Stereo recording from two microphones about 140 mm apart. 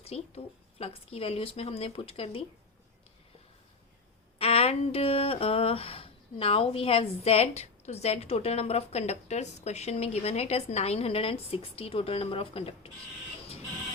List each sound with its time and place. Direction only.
0.0 s speech: 45° left (ahead or behind)
4.4 s speech: 45° left (ahead or behind)